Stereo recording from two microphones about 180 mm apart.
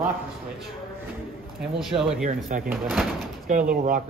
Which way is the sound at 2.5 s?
45° right (ahead or behind).